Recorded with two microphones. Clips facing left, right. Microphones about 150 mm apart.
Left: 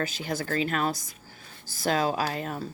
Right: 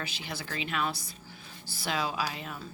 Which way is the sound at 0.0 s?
45° left (ahead or behind).